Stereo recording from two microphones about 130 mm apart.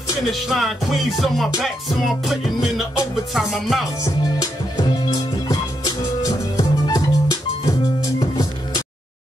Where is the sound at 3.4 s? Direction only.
Centre (ahead or behind).